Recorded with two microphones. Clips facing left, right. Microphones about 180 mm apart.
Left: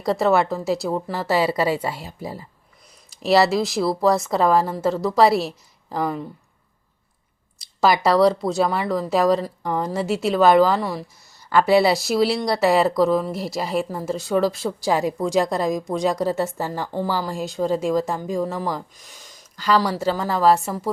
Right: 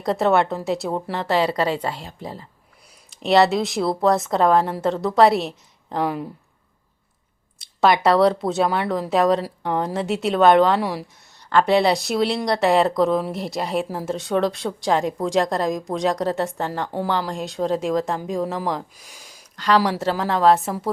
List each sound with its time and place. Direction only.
0.0 s speech: centre (ahead or behind)
7.6 s speech: centre (ahead or behind)
10.8 s speech: 10° right (ahead or behind)
11.4 s speech: 5° left (ahead or behind)
19.0 s a sound: 10° right (ahead or behind)
19.5 s speech: centre (ahead or behind)